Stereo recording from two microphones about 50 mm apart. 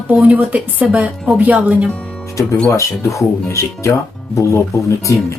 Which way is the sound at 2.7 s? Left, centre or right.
Left.